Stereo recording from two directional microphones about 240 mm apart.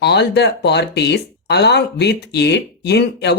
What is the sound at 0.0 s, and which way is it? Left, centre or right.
Speech, left.